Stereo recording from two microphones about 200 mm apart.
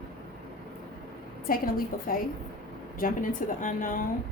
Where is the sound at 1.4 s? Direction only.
45° left (ahead or behind).